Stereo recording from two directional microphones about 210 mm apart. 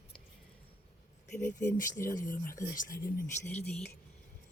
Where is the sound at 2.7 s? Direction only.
40° left (ahead or behind).